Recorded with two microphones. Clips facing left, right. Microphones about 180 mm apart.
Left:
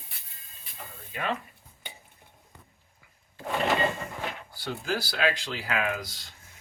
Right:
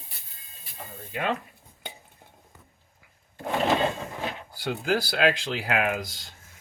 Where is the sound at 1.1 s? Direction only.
45° right (ahead or behind).